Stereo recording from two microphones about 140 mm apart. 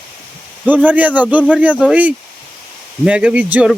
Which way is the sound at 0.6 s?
10° right (ahead or behind).